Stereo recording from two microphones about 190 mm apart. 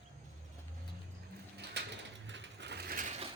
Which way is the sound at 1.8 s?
65° right (ahead or behind).